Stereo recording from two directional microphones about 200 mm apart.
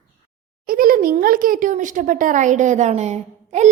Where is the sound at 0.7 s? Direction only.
45° right (ahead or behind).